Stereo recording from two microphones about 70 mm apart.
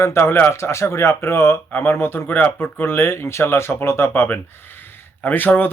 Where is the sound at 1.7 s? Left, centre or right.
Left.